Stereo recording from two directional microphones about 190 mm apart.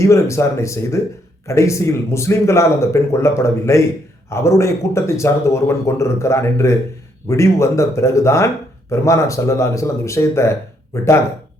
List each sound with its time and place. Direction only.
0.0 s speech: 15° left (ahead or behind)